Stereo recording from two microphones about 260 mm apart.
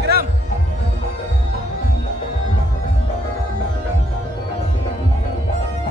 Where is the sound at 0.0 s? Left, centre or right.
Right.